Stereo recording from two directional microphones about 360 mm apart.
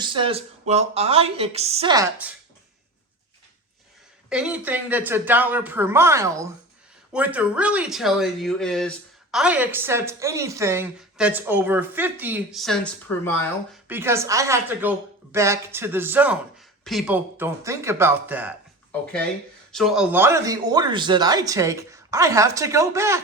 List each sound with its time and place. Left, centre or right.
0.0 s speech: centre
4.3 s speech: centre
13.8 s speech: centre